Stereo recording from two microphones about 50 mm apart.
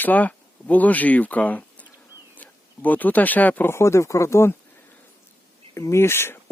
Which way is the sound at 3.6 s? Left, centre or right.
Left.